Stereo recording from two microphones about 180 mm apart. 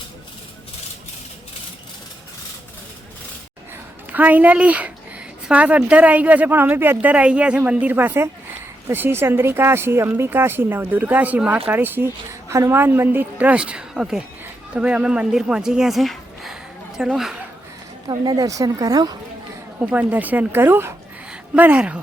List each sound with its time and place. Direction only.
4.1 s a woman's voice: 10° right (ahead or behind)
18.1 s speech: 20° right (ahead or behind)
19.8 s speech: 10° right (ahead or behind)